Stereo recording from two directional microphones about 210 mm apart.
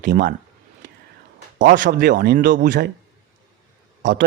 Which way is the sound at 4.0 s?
40° right (ahead or behind).